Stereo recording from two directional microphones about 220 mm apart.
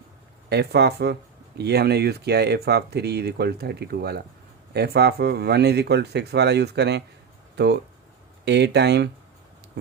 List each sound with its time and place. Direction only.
0.5 s speech: 50° right (ahead or behind)